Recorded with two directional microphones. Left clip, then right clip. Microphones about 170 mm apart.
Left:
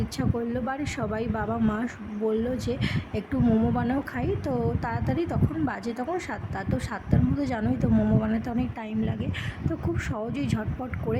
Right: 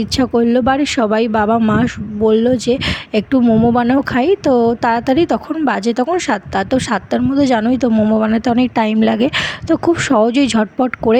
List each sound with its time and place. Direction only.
0.2 s speech: 45° right (ahead or behind)
3.4 s speech: 30° right (ahead or behind)
3.7 s speech: 45° right (ahead or behind)